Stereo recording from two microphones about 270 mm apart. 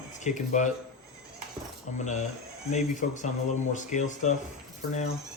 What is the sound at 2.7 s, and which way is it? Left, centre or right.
Speech, left.